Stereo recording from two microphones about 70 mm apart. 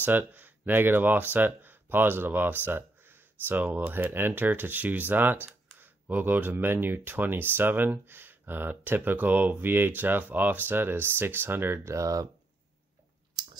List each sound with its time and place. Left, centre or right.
0.0 s speech: right
11.9 s speech: right
13.4 s chewing: right